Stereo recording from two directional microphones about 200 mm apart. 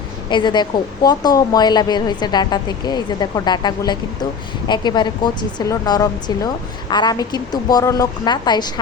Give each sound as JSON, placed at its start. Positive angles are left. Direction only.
{"t": 0.3, "sound": "a woman's voice", "side_deg": 25}